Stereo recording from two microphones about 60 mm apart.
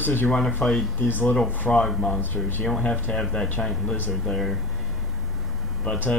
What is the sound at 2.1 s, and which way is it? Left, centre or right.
Speech, left.